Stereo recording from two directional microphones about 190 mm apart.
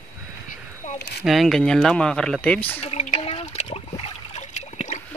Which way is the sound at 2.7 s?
35° left (ahead or behind).